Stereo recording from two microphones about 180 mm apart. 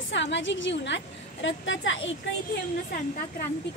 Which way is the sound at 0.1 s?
90° left.